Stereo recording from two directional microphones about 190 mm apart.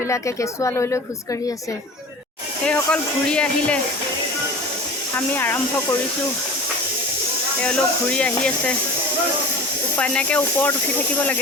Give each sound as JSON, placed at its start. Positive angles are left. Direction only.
{"t": 0.1, "sound": "a woman's voice", "side_deg": 15}
{"t": 2.6, "sound": "speech", "side_deg": 5}
{"t": 5.1, "sound": "a woman's voice", "side_deg": 10}
{"t": 7.6, "sound": "speech", "side_deg": 5}
{"t": 10.0, "sound": "a woman's voice", "side_deg": 5}